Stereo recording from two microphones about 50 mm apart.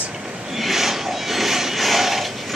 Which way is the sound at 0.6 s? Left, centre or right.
Centre.